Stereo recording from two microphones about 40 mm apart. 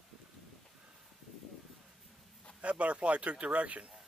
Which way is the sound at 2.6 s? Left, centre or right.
Right.